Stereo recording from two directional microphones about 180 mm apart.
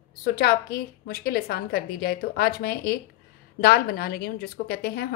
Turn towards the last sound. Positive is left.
turn(degrees=60)  # may be behind; listen again after turning